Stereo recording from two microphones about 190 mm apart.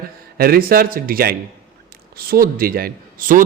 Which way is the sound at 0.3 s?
50° right (ahead or behind).